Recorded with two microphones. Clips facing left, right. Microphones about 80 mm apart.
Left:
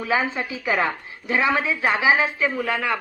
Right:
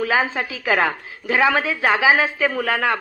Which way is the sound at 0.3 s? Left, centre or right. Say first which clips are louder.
Right 3 dB; right.